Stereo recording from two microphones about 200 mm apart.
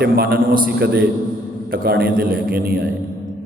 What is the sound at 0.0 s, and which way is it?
A man's voice, 50° right (ahead or behind).